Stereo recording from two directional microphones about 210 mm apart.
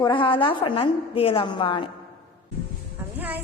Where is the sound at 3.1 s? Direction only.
10° right (ahead or behind).